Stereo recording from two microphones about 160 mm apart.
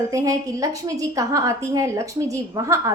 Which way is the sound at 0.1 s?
20° right (ahead or behind).